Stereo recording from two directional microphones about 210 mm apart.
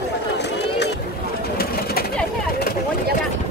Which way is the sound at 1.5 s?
45° left (ahead or behind).